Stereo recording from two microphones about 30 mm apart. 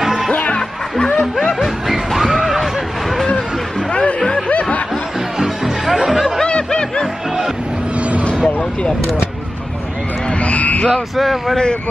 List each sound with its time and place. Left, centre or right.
0.0 s music: centre
0.3 s speech: left
0.6 s music: left
1.9 s a sound: centre
3.9 s music: left
4.5 s snicker: left
5.9 s music: centre
6.4 s snicker: left
10.4 s vehicle: left
10.9 s speech: centre